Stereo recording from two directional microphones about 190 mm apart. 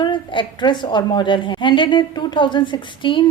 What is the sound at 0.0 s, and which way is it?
A woman's voice, 25° left (ahead or behind).